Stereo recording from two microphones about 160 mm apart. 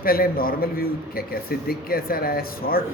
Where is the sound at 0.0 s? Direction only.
65° left (ahead or behind).